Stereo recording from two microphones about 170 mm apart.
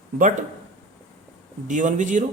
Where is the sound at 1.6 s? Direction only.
50° right (ahead or behind).